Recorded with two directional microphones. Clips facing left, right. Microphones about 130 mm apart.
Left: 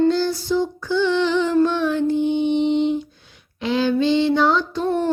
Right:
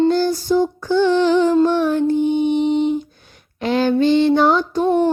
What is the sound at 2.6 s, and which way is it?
Lullaby, 45° right (ahead or behind).